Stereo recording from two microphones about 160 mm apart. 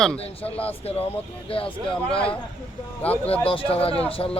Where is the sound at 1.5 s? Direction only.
35° left (ahead or behind).